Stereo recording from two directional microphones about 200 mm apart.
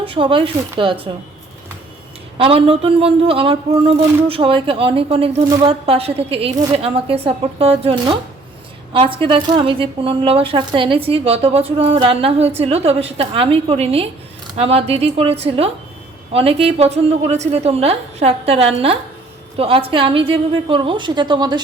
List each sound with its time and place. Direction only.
0.0 s a woman's voice: 25° right (ahead or behind)
2.4 s a woman's voice: 30° right (ahead or behind)